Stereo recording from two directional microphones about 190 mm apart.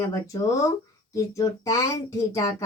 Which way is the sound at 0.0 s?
15° left (ahead or behind).